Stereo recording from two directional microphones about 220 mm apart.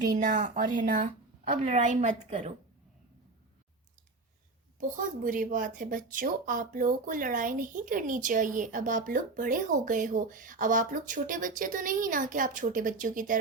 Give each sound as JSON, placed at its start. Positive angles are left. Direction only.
{"t": 0.2, "sound": "a woman's voice", "side_deg": -35}
{"t": 4.8, "sound": "a woman's voice", "side_deg": -35}